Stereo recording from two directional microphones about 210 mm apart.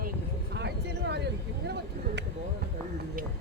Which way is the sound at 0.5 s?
55° right (ahead or behind).